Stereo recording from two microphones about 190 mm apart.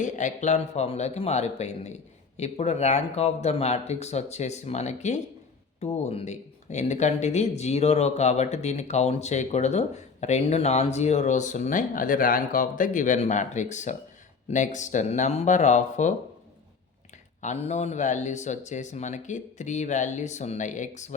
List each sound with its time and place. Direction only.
0.0 s speech: 40° left (ahead or behind)
17.4 s speech: 35° left (ahead or behind)